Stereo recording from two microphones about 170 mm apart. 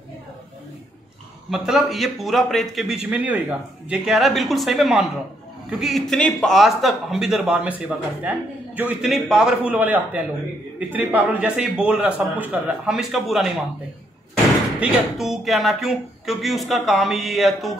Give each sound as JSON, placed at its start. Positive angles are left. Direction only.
{"t": 1.5, "sound": "a man's voice", "side_deg": 0}
{"t": 14.8, "sound": "a man's voice", "side_deg": 0}